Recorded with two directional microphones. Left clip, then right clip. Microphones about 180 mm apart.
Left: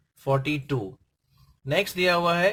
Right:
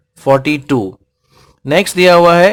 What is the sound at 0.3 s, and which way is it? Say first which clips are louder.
Speech: right 14 dB; 35° right (ahead or behind).